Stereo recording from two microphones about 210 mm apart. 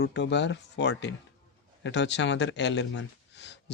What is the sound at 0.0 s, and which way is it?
Speech, 55° left (ahead or behind).